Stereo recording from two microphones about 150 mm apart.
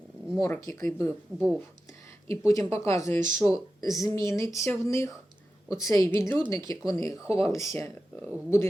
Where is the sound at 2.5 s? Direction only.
20° left (ahead or behind).